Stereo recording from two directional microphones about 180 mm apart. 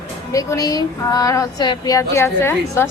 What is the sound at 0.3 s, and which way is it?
Speech, 20° left (ahead or behind).